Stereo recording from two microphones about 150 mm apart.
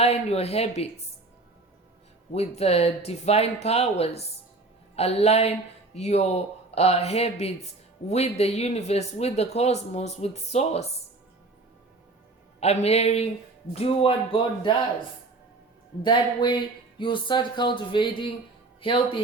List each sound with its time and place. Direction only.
0.0 s speech: 45° left (ahead or behind)
2.3 s speech: 45° left (ahead or behind)
12.5 s speech: 45° left (ahead or behind)
16.0 s speech: 30° left (ahead or behind)